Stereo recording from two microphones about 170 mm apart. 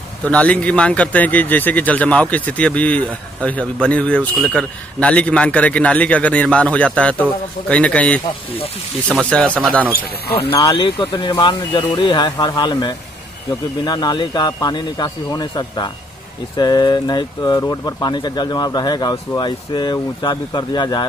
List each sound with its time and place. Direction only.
0.2 s speech: 10° left (ahead or behind)
10.3 s speech: 30° left (ahead or behind)